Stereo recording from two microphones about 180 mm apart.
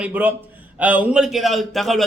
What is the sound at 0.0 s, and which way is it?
A man's voice, 10° right (ahead or behind).